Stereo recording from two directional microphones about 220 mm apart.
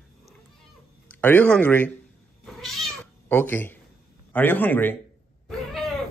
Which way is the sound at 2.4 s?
Centre (ahead or behind).